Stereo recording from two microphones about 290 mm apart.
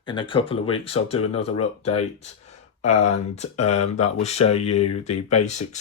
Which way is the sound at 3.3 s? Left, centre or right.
Left.